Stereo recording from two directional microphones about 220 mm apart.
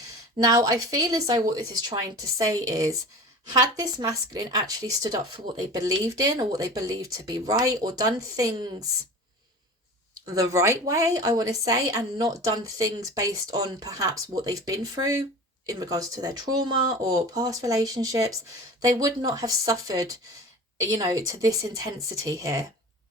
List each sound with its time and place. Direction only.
0.3 s a woman's voice: 15° right (ahead or behind)
10.2 s a woman's voice: 15° right (ahead or behind)